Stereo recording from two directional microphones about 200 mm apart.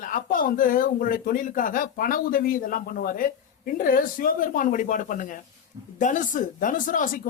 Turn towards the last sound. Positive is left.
turn(degrees=40)  # may be behind; listen again after turning